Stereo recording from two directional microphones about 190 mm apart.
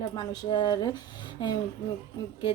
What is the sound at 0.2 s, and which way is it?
A woman's voice, 20° left (ahead or behind).